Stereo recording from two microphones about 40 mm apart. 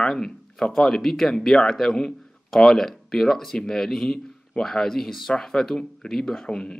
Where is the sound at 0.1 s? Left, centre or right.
Centre.